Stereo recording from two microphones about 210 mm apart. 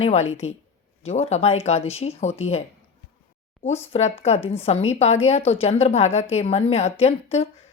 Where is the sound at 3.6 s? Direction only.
30° left (ahead or behind).